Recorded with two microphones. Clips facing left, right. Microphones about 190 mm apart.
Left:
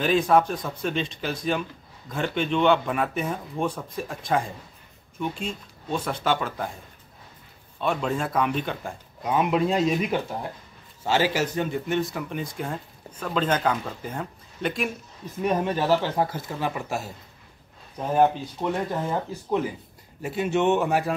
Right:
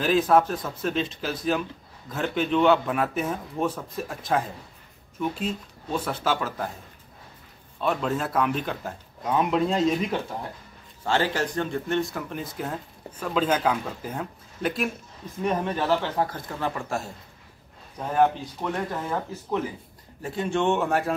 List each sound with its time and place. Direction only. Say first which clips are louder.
0.0 s speech: even; centre (ahead or behind)
7.8 s speech: even; centre (ahead or behind)
15.4 s speech: left 2 dB; 10° left (ahead or behind)
18.6 s speech: left 3 dB; 15° left (ahead or behind)